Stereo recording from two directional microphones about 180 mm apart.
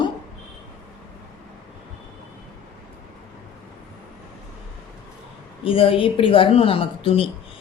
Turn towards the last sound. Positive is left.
turn(degrees=30)  # may be behind; listen again after turning